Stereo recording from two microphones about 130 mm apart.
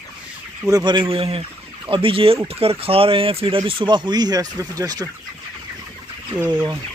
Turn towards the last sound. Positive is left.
turn(degrees=-10)  # may be behind; listen again after turning